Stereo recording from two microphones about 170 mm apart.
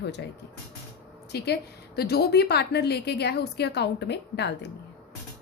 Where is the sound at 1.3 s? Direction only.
70° left (ahead or behind).